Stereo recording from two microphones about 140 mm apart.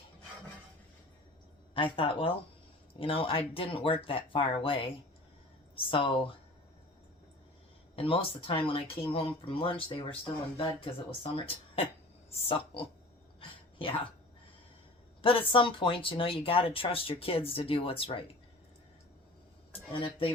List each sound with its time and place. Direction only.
1.7 s speech: 40° left (ahead or behind)
7.9 s speech: 40° left (ahead or behind)
13.4 s a sound: 40° left (ahead or behind)
15.2 s speech: 40° left (ahead or behind)
19.9 s speech: 40° left (ahead or behind)